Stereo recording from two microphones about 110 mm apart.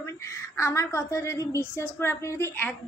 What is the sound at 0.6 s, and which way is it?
A woman's voice, 25° left (ahead or behind).